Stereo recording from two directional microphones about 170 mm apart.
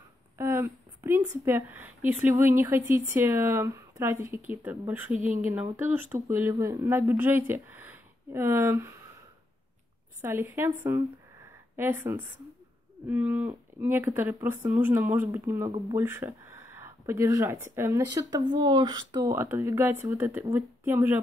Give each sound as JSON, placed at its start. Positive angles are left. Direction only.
{"t": 0.4, "sound": "speech", "side_deg": -15}
{"t": 5.1, "sound": "speech", "side_deg": -50}
{"t": 5.4, "sound": "speech", "side_deg": -10}
{"t": 10.2, "sound": "speech", "side_deg": -15}